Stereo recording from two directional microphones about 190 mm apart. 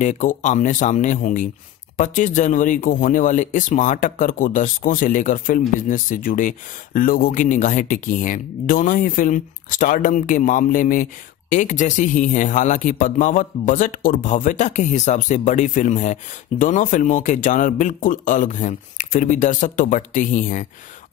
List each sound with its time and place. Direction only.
0.0 s speech: 40° left (ahead or behind)